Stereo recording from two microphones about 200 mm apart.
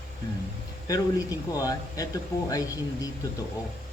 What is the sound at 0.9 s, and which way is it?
Speech, 15° left (ahead or behind).